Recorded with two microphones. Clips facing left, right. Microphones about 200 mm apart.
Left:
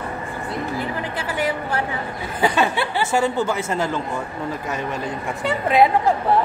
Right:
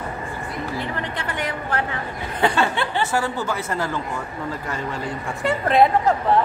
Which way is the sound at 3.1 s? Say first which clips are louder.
Left 4 dB; 25° left (ahead or behind).